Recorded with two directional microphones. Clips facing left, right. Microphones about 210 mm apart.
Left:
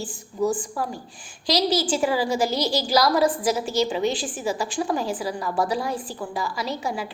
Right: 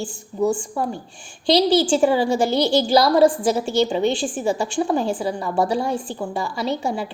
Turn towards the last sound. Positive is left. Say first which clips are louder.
# right 5 dB
turn(degrees=-25)  # may be behind; listen again after turning